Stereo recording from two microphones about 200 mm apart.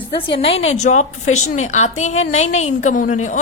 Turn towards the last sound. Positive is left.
turn(degrees=40)  # may be behind; listen again after turning